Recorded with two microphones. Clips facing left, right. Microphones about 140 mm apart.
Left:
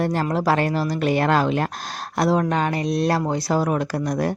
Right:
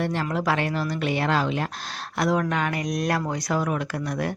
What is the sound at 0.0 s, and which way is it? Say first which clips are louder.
Speech: left 4 dB; 40° left (ahead or behind).